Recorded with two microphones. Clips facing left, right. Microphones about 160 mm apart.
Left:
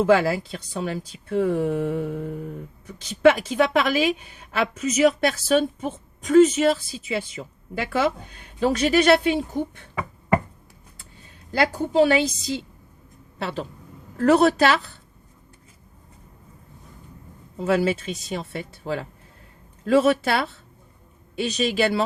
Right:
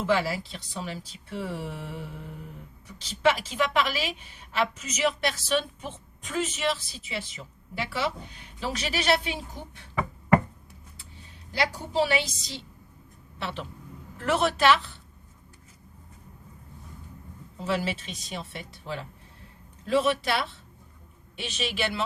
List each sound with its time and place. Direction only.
0.0 s a woman's voice: 50° left (ahead or behind)
11.5 s a woman's voice: 50° left (ahead or behind)
13.4 s speech: 40° left (ahead or behind)
17.6 s a woman's voice: 45° left (ahead or behind)
21.4 s speech: 40° left (ahead or behind)